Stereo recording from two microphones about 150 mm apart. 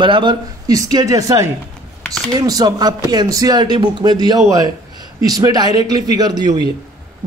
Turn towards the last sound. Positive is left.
turn(degrees=-30)  # may be behind; listen again after turning